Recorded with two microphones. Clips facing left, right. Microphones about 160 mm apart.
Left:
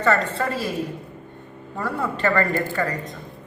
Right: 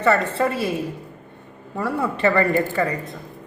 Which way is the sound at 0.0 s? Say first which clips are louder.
Right 2 dB; 20° right (ahead or behind).